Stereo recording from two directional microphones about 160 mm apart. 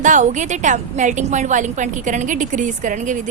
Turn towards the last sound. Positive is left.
turn(degrees=-50)  # may be behind; listen again after turning